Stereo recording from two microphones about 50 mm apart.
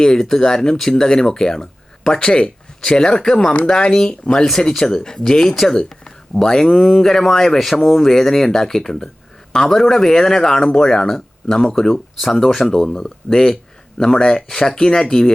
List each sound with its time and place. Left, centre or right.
0.0 s speech: centre